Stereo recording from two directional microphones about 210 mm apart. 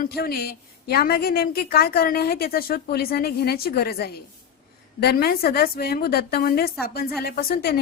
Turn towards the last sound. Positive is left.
turn(degrees=45)  # may be behind; listen again after turning